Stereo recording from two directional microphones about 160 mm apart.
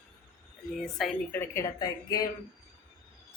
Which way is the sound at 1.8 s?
25° left (ahead or behind).